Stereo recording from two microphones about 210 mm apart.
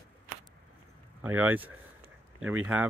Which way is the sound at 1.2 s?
10° right (ahead or behind).